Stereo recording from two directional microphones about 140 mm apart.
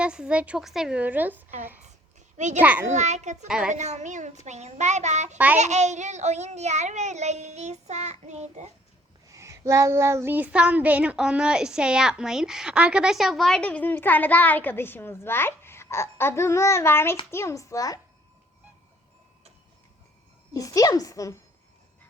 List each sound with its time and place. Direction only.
0.0 s a woman's voice: 5° right (ahead or behind)
2.6 s a woman's voice: 10° right (ahead or behind)
2.9 s child singing: 55° right (ahead or behind)
3.4 s a child's voice: 5° right (ahead or behind)
3.7 s child singing: 55° right (ahead or behind)
9.3 s a child's voice: 20° right (ahead or behind); by 18.0 s 25° left (ahead or behind)
20.5 s a woman's voice: 25° left (ahead or behind)